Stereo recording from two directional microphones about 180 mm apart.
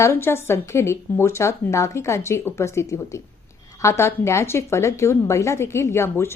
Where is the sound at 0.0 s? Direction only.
15° left (ahead or behind).